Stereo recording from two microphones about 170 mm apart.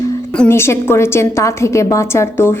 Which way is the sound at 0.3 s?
15° left (ahead or behind).